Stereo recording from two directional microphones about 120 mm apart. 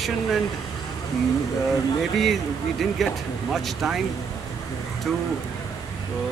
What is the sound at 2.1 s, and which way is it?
Speech, centre (ahead or behind).